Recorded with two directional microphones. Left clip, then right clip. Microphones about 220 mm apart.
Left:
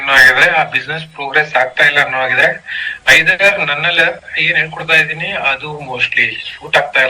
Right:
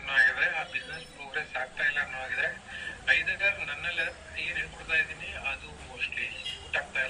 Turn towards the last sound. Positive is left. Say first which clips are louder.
# left 19 dB
turn(degrees=45)  # may be behind; listen again after turning